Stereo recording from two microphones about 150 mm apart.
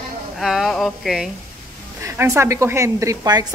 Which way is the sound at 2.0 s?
20° right (ahead or behind).